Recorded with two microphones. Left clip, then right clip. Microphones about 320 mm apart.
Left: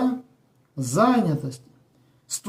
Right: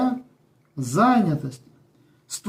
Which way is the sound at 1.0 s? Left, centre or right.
Centre.